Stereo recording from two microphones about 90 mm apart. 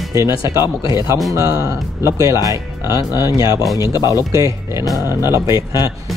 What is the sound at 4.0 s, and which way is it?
Speech, 45° left (ahead or behind).